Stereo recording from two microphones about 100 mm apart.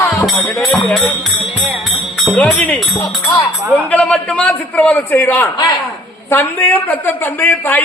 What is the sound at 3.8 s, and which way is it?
A man's voice, 15° left (ahead or behind).